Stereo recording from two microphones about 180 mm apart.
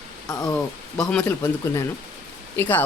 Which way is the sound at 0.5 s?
5° left (ahead or behind).